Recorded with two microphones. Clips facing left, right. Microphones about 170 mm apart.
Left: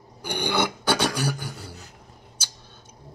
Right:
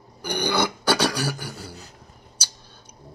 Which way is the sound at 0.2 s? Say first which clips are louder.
Right 1 dB; 20° left (ahead or behind).